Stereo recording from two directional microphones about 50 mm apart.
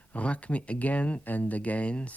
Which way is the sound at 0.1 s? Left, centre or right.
Left.